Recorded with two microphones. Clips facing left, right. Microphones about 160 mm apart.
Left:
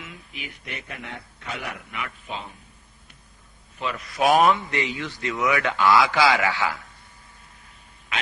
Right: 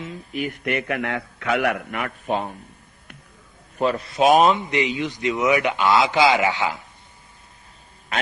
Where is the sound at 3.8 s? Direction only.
35° right (ahead or behind).